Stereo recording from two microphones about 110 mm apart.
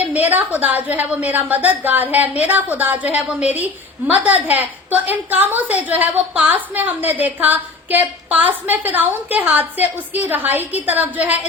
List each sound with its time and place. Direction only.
0.1 s a woman's voice: 15° right (ahead or behind)